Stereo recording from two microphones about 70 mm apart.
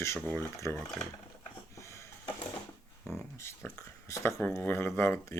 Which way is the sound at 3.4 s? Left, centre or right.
Left.